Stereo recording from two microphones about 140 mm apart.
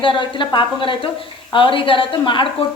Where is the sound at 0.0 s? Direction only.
35° left (ahead or behind).